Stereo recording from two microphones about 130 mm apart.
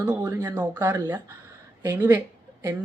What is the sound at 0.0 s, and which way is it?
Speech, 10° right (ahead or behind).